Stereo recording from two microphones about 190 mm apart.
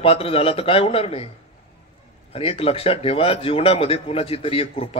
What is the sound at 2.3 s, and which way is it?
A man's voice, 30° left (ahead or behind).